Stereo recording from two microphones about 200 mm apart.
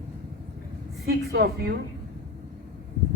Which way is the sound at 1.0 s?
55° right (ahead or behind).